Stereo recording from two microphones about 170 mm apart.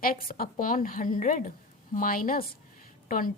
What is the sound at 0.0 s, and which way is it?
A woman's voice, 60° left (ahead or behind).